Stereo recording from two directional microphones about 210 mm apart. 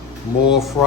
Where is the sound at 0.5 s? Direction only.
Centre (ahead or behind).